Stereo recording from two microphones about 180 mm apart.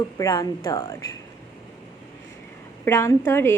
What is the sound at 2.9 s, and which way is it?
Speech, 15° left (ahead or behind).